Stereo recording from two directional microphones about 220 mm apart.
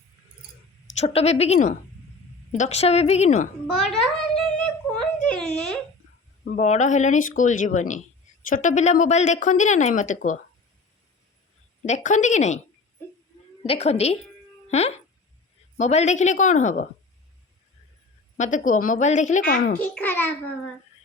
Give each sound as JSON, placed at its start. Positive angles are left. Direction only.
{"t": 0.9, "sound": "a woman's voice", "side_deg": 30}
{"t": 3.8, "sound": "a child's voice", "side_deg": 0}
{"t": 5.2, "sound": "a sound", "side_deg": 5}
{"t": 6.4, "sound": "speech", "side_deg": 30}
{"t": 11.9, "sound": "speech", "side_deg": 35}
{"t": 13.7, "sound": "a woman's voice", "side_deg": 30}
{"t": 18.3, "sound": "speech", "side_deg": 35}
{"t": 19.8, "sound": "a child's voice", "side_deg": 5}